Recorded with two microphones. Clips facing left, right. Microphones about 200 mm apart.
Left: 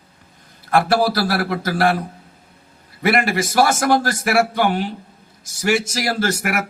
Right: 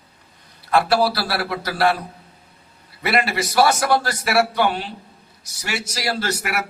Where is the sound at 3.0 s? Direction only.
50° left (ahead or behind).